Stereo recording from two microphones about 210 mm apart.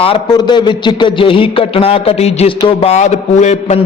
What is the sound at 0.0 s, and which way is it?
A man's voice, 25° left (ahead or behind).